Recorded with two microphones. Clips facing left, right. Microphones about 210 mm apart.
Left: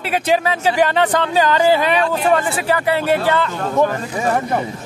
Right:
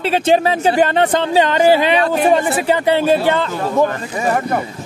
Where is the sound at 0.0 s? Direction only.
30° right (ahead or behind).